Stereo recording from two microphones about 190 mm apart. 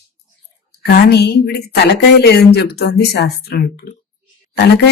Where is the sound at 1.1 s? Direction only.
60° left (ahead or behind).